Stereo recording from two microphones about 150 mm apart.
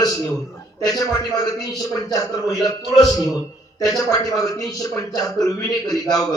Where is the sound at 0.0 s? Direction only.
25° left (ahead or behind).